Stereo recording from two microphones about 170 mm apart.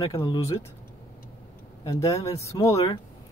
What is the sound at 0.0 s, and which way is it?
Speech, 25° left (ahead or behind).